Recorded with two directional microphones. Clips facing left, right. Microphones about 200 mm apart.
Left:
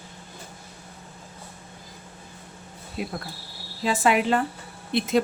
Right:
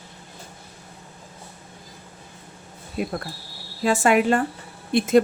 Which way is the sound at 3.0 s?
50° right (ahead or behind).